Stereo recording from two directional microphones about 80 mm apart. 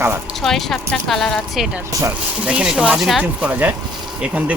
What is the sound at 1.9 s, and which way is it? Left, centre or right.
Speech, right.